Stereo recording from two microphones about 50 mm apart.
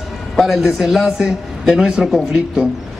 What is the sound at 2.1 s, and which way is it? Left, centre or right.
Speech, centre.